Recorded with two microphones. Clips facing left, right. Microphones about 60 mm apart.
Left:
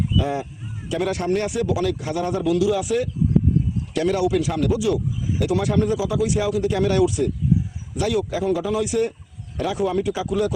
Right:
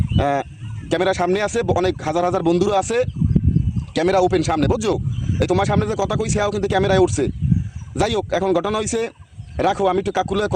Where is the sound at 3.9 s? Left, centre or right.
Right.